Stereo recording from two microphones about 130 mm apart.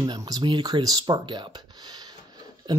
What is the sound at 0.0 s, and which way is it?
Speech, 35° right (ahead or behind).